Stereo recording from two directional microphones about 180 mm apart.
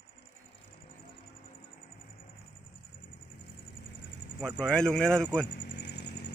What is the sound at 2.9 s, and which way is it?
Vehicle, 50° left (ahead or behind).